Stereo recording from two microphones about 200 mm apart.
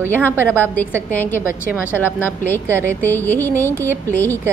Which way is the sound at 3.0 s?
10° left (ahead or behind).